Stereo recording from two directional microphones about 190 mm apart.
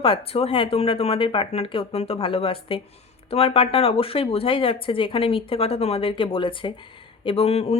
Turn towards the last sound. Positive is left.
turn(degrees=35)  # may be behind; listen again after turning